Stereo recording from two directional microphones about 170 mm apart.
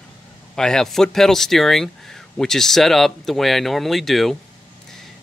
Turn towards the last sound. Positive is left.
turn(degrees=0)  # may be behind; listen again after turning